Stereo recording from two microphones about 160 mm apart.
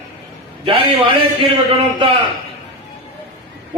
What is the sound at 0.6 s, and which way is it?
Speech, 35° right (ahead or behind).